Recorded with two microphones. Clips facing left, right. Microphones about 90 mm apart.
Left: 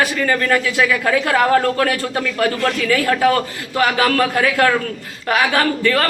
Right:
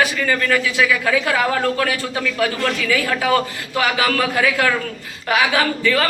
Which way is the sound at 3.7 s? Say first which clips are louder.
Left 3 dB; 40° left (ahead or behind).